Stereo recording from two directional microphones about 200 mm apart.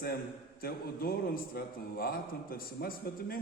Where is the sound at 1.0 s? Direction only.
50° left (ahead or behind).